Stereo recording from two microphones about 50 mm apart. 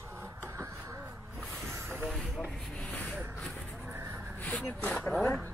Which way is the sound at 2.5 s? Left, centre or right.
Centre.